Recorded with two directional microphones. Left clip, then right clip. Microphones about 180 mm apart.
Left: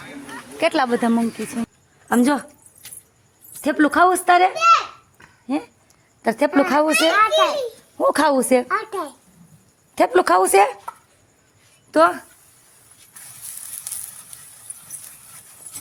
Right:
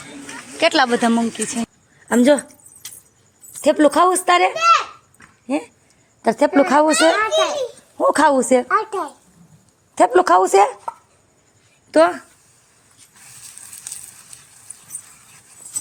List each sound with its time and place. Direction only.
0.5 s speech: 5° left (ahead or behind)
3.6 s speech: centre (ahead or behind)
7.2 s a child's voice: 30° left (ahead or behind)
7.9 s speech: centre (ahead or behind)
11.9 s speech: 10° right (ahead or behind)